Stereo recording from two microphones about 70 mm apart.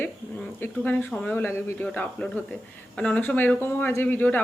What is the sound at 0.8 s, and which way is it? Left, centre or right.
Speech, left.